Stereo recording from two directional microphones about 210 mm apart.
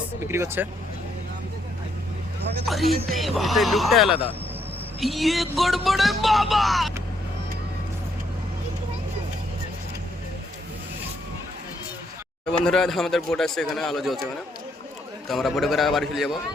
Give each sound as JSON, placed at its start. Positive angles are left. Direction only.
{"t": 0.3, "sound": "speech", "side_deg": -10}
{"t": 2.6, "sound": "speech", "side_deg": 0}
{"t": 12.5, "sound": "speech", "side_deg": 0}
{"t": 15.3, "sound": "speech", "side_deg": 0}